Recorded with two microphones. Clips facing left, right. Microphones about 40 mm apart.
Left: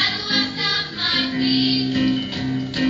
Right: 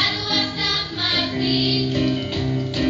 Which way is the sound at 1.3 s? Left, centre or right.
Centre.